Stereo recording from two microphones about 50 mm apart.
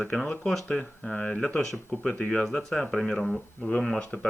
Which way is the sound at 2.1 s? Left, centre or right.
Centre.